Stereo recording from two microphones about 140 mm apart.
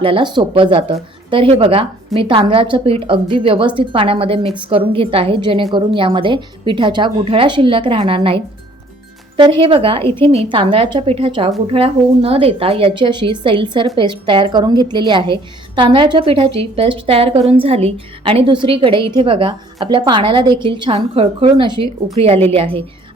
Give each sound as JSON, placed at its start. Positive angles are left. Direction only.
{"t": 0.0, "sound": "a woman's voice", "side_deg": -35}
{"t": 9.4, "sound": "a woman's voice", "side_deg": -40}